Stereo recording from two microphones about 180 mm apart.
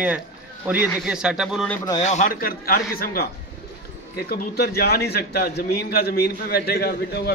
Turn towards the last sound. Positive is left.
turn(degrees=60)  # may be behind; listen again after turning